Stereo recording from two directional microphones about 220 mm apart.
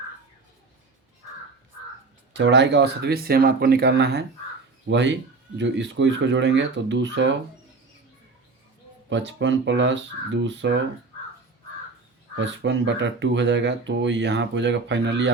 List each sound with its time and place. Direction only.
2.3 s speech: 55° right (ahead or behind)
9.0 s speech: 55° right (ahead or behind)
12.4 s speech: 55° right (ahead or behind)